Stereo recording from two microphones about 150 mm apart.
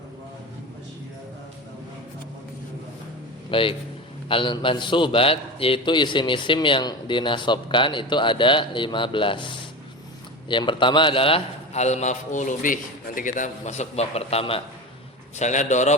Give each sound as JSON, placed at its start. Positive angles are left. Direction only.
{"t": 3.5, "sound": "a man's voice", "side_deg": 35}
{"t": 10.5, "sound": "a man's voice", "side_deg": 35}
{"t": 15.4, "sound": "a man's voice", "side_deg": 50}